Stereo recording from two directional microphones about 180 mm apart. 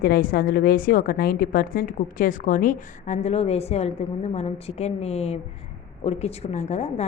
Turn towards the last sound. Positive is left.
turn(degrees=40)  # may be behind; listen again after turning